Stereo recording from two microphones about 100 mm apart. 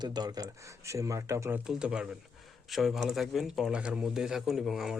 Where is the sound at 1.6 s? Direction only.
5° right (ahead or behind).